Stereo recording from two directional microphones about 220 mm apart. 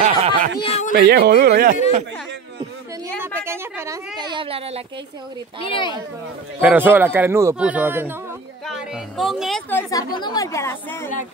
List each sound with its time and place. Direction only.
0.0 s a sound: 25° right (ahead or behind)
0.6 s a sound: 30° left (ahead or behind)
0.9 s speech: 45° right (ahead or behind)
3.3 s a woman's voice: 10° right (ahead or behind); by 4.8 s 25° right (ahead or behind)
5.6 s speech: 20° left (ahead or behind)
6.6 s speech: 10° right (ahead or behind); by 11.1 s 10° left (ahead or behind)